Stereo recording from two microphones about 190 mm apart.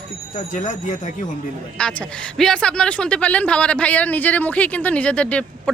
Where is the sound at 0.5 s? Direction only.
40° left (ahead or behind).